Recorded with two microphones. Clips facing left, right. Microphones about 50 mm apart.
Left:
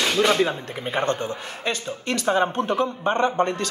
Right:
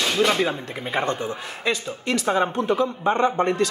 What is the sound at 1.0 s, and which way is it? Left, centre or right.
Speech, left.